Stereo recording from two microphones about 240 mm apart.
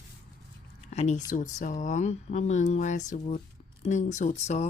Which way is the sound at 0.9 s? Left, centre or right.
Left.